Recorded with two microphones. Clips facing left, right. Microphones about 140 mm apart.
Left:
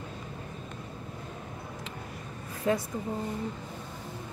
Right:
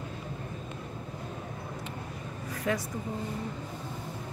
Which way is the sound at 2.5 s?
25° left (ahead or behind).